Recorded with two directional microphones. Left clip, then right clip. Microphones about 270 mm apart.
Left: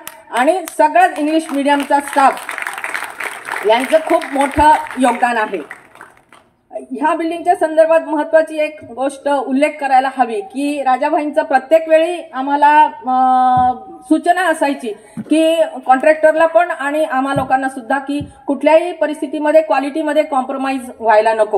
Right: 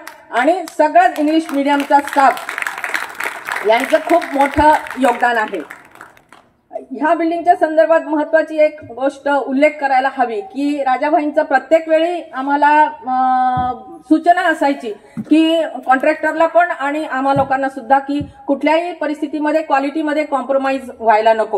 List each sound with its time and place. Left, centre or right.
0.3 s a woman's voice: left
2.6 s applause: right
4.4 s a woman's voice: left
7.0 s a woman's voice: left